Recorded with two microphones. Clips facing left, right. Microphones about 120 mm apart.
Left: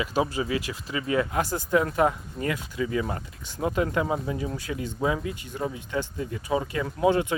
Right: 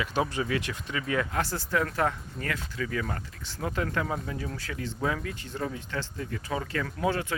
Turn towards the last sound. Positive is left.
turn(degrees=20)  # may be behind; listen again after turning